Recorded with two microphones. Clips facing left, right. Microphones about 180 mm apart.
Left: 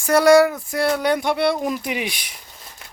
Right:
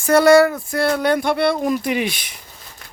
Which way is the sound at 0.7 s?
10° left (ahead or behind).